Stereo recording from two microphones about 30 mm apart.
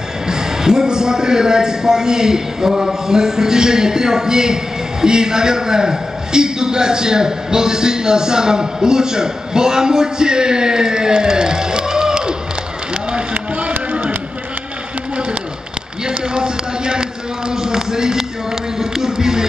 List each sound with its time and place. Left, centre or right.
0.3 s a man's voice: right
13.3 s run: right
16.1 s a sound: right